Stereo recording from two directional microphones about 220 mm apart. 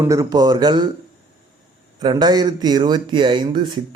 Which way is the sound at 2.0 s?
20° right (ahead or behind).